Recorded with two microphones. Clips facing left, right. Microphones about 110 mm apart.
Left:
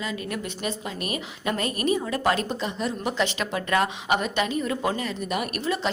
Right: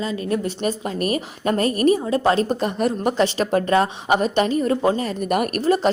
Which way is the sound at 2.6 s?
50° right (ahead or behind).